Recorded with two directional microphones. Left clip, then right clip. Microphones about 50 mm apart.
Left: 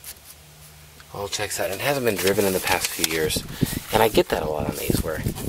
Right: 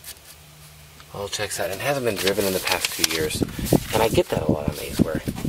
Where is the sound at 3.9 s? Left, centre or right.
Left.